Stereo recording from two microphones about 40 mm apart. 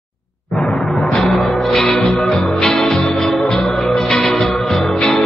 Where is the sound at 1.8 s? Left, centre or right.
Centre.